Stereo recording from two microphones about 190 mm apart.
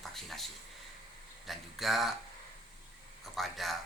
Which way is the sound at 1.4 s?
Centre (ahead or behind).